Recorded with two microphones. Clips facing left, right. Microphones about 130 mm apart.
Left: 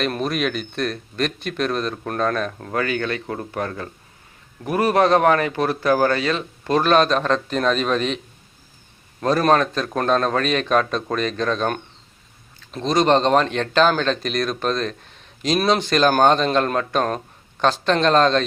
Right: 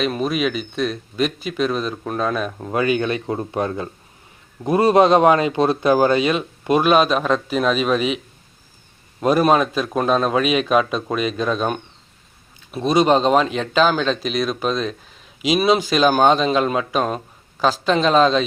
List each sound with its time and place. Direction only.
0.0 s speech: centre (ahead or behind)
2.6 s a man's voice: 15° right (ahead or behind)
9.2 s a man's voice: 10° right (ahead or behind)